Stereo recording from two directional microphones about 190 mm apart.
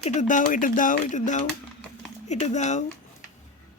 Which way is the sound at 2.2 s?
40° left (ahead or behind).